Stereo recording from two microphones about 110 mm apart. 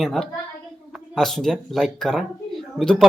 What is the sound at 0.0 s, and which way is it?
Speech, centre (ahead or behind).